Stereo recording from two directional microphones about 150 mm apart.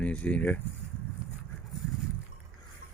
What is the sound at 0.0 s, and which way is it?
Speech, 10° left (ahead or behind).